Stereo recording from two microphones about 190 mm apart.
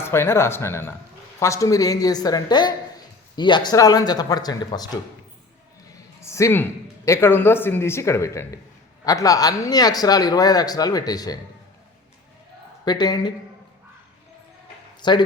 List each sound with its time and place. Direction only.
0.0 s speech: 15° left (ahead or behind)
6.2 s speech: 15° left (ahead or behind)
12.8 s speech: 20° left (ahead or behind)
15.0 s speech: 25° left (ahead or behind)